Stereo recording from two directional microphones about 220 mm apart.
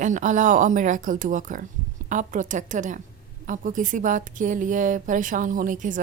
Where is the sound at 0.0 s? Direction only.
35° right (ahead or behind).